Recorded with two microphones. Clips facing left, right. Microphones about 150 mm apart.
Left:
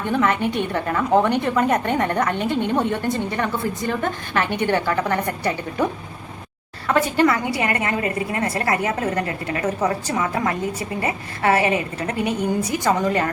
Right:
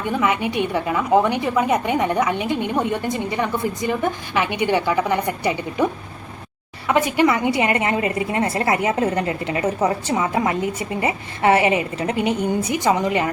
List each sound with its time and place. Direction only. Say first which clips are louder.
0.0 s a woman's voice: left 1 dB; 10° right (ahead or behind)